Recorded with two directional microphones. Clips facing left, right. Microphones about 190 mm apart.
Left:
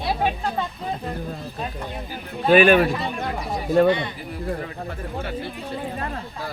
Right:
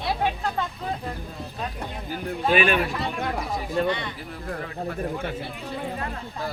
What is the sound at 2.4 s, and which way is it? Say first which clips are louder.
Speech: left 7 dB; 45° left (ahead or behind).